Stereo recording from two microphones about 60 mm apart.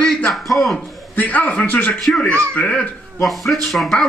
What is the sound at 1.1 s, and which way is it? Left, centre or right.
Speech, left.